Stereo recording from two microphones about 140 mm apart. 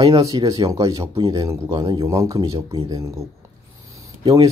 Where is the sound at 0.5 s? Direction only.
25° right (ahead or behind).